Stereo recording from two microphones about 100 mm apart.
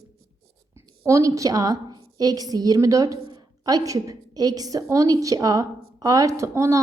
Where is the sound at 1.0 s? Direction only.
35° right (ahead or behind).